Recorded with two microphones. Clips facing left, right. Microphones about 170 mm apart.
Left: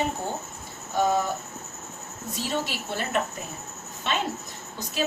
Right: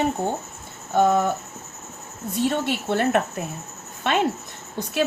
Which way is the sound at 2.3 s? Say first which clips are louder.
Right 7 dB; 60° right (ahead or behind).